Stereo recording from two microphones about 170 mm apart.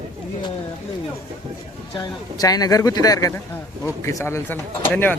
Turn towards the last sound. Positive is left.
turn(degrees=10)  # may be behind; listen again after turning